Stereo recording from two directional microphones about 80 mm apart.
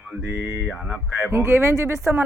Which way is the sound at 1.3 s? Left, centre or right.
Right.